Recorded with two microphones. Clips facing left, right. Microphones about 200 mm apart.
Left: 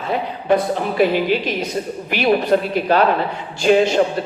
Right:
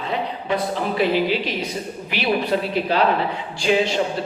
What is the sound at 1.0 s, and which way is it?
Speech, 50° left (ahead or behind).